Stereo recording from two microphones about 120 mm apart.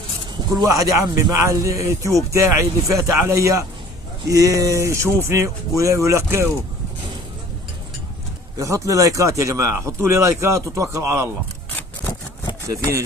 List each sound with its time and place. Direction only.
0.6 s speech: 30° right (ahead or behind)
8.5 s speech: 25° right (ahead or behind)